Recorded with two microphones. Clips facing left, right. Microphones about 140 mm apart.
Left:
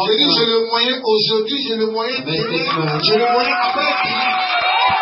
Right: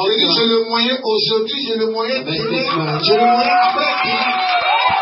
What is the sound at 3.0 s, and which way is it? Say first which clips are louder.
Speech: right 3 dB; 25° right (ahead or behind).